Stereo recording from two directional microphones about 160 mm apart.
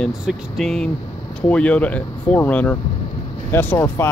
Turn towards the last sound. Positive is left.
turn(degrees=15)  # may be behind; listen again after turning